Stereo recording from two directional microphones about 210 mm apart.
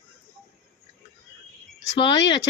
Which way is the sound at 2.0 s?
20° left (ahead or behind).